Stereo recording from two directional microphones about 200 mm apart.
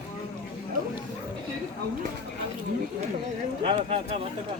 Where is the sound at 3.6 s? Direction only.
25° right (ahead or behind).